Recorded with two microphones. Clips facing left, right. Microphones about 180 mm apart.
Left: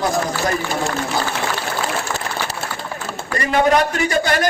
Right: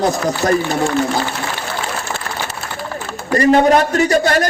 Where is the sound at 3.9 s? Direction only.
40° right (ahead or behind).